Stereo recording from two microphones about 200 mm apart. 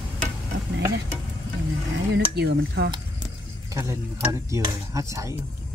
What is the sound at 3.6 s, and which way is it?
Speech, 15° right (ahead or behind).